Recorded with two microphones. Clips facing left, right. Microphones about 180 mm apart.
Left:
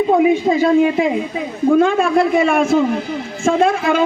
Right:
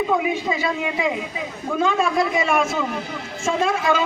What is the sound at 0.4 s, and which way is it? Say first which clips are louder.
Speech: left 11 dB; 50° left (ahead or behind).